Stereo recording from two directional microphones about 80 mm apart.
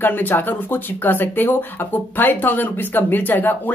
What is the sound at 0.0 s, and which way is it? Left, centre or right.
Speech, left.